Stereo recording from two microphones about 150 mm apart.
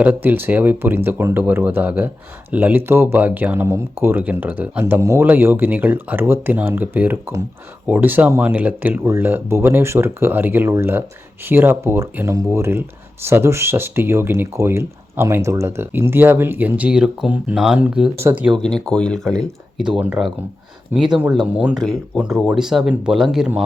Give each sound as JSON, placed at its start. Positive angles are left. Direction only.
{"t": 0.0, "sound": "speech", "side_deg": -10}
{"t": 18.5, "sound": "speech", "side_deg": 5}